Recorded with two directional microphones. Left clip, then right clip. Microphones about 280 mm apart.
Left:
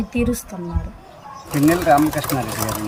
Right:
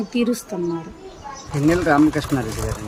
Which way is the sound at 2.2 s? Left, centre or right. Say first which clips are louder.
Left 1 dB; left.